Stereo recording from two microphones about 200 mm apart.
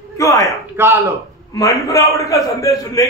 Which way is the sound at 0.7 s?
15° right (ahead or behind).